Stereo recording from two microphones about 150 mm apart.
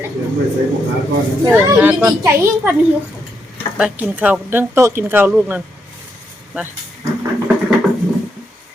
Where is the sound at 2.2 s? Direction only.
15° right (ahead or behind).